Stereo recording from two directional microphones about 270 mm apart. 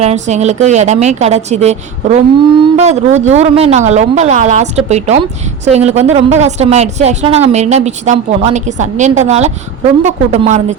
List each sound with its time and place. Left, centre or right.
0.0 s a woman's voice: right